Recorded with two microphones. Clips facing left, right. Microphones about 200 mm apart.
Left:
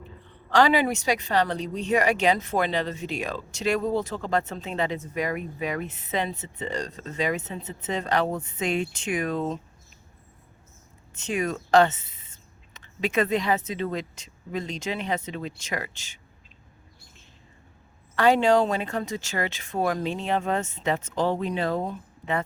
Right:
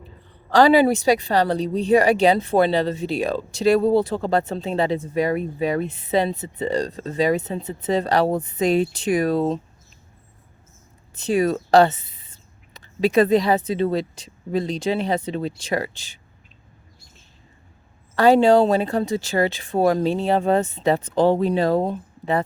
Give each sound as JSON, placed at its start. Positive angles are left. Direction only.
{"t": 0.0, "sound": "a woman's voice", "side_deg": -35}
{"t": 11.1, "sound": "speech", "side_deg": -35}
{"t": 18.1, "sound": "a woman's voice", "side_deg": -35}